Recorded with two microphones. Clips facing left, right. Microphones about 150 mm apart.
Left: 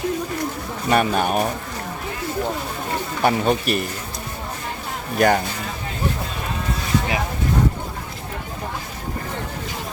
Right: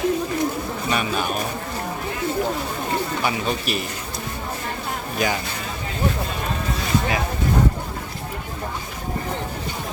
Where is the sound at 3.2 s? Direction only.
50° left (ahead or behind).